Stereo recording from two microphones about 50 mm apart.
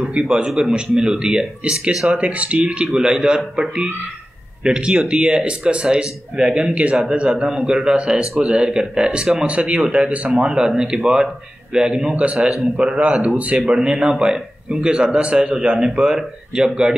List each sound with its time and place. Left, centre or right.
0.1 s a man's voice: centre
10.3 s a man's voice: centre
12.4 s a man's voice: centre
12.7 s a man's voice: right